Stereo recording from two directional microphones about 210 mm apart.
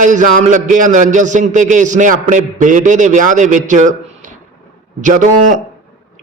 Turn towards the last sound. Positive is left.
turn(degrees=-35)  # may be behind; listen again after turning